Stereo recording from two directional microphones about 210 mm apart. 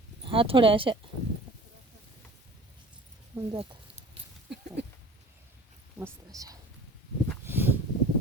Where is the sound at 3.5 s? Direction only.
20° right (ahead or behind).